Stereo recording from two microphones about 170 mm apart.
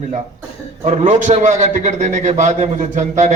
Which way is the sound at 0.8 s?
40° right (ahead or behind).